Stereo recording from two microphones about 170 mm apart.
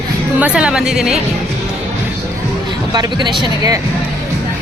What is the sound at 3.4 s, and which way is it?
Speech, 20° right (ahead or behind).